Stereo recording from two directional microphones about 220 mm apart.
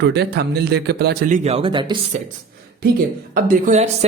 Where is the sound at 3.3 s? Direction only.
40° right (ahead or behind).